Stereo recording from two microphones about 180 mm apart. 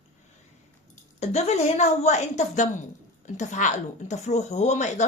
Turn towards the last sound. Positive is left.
turn(degrees=40)  # may be behind; listen again after turning